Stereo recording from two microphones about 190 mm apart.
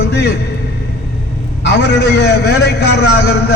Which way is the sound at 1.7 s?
60° left (ahead or behind).